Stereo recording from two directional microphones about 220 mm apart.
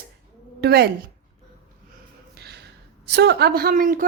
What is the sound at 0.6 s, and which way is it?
Speech, 45° right (ahead or behind).